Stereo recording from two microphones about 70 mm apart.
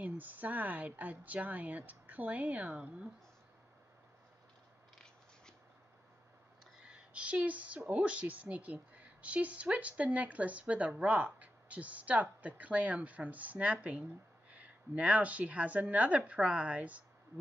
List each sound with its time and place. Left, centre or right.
0.0 s speech: right
6.8 s speech: centre